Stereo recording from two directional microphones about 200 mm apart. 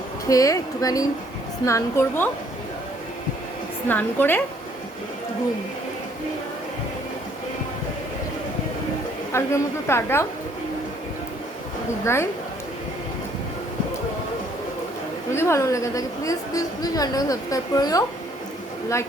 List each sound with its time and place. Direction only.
0.3 s a woman's voice: 15° left (ahead or behind)
3.8 s a woman's voice: 10° left (ahead or behind)
9.3 s a woman's voice: 15° left (ahead or behind)
12.0 s a woman's voice: 15° left (ahead or behind)
15.3 s a woman's voice: 15° left (ahead or behind)